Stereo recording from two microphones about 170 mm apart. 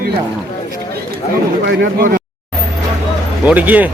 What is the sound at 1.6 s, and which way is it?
Speech, 75° right (ahead or behind).